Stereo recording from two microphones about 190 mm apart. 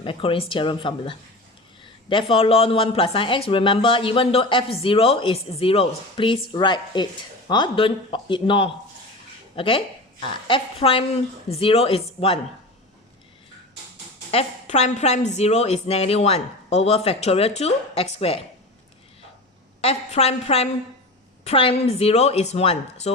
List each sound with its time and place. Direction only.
0.0 s speech: 25° left (ahead or behind)
14.3 s a woman's voice: 35° left (ahead or behind)
19.8 s a woman's voice: 35° left (ahead or behind)